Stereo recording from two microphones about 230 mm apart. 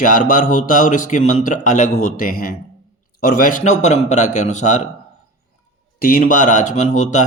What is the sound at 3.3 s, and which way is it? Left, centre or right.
A man's voice, left.